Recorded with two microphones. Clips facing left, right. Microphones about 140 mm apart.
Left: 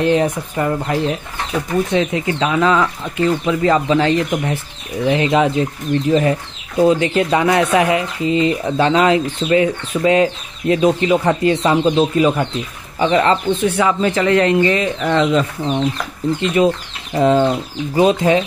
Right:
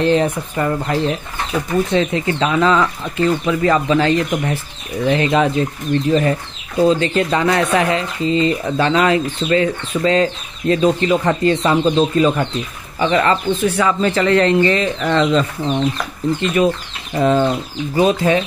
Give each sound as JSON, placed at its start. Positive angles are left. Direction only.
{"t": 0.0, "sound": "speech", "side_deg": 10}
{"t": 3.4, "sound": "speech", "side_deg": 20}
{"t": 13.0, "sound": "speech", "side_deg": 25}